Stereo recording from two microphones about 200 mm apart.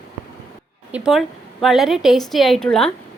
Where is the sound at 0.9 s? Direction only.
Centre (ahead or behind).